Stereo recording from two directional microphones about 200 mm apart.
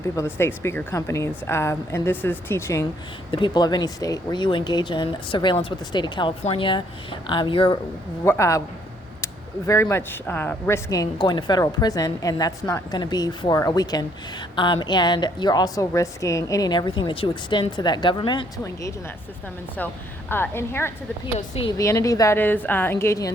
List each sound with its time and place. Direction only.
0.0 s speech: 15° left (ahead or behind)
3.3 s speech: 25° left (ahead or behind)
8.2 s speech: 15° left (ahead or behind)
20.3 s speech: 10° left (ahead or behind)
21.3 s speech: 30° left (ahead or behind)
21.8 s speech: 15° left (ahead or behind)